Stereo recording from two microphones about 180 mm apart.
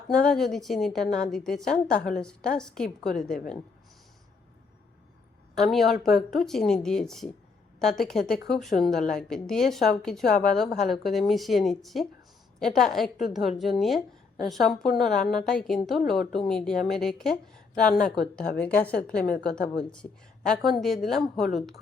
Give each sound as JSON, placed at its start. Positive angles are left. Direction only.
{"t": 0.1, "sound": "a woman's voice", "side_deg": 5}
{"t": 5.5, "sound": "a woman's voice", "side_deg": 0}
{"t": 18.6, "sound": "a woman's voice", "side_deg": 10}